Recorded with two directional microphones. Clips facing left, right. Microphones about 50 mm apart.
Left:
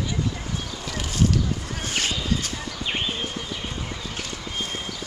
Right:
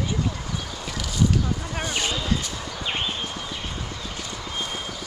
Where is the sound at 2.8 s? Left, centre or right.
Centre.